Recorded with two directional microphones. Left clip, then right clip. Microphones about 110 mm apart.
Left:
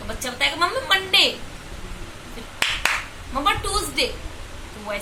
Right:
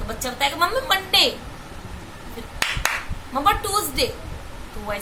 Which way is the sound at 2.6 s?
10° right (ahead or behind).